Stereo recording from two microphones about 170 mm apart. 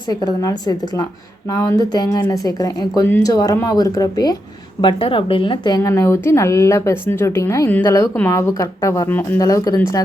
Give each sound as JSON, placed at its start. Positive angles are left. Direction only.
{"t": 0.1, "sound": "speech", "side_deg": 20}